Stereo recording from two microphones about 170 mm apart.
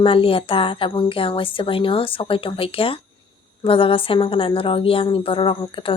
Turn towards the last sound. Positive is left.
turn(degrees=30)  # may be behind; listen again after turning